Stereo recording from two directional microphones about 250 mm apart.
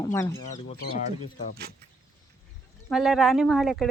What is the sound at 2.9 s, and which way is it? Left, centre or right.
Speech, centre.